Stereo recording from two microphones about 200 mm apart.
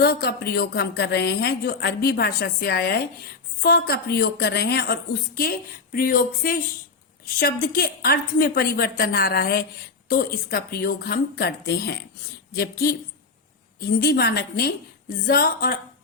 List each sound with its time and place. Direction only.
0.0 s a woman's voice: 50° left (ahead or behind)